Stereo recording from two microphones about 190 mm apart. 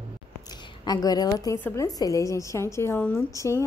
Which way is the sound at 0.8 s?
20° left (ahead or behind).